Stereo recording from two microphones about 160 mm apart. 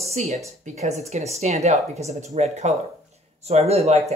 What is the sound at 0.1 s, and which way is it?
Speech, 45° right (ahead or behind).